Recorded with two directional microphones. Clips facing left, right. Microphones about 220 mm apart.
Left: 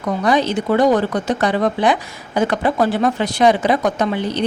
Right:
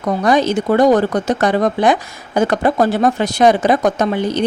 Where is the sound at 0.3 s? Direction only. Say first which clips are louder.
Right 2 dB; 45° right (ahead or behind).